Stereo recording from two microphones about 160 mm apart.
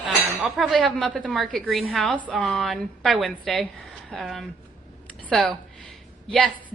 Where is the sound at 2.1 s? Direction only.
10° right (ahead or behind).